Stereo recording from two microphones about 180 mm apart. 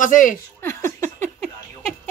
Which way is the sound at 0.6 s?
15° left (ahead or behind).